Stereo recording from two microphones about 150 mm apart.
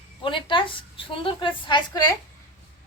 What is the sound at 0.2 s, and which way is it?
A woman's voice, 35° left (ahead or behind).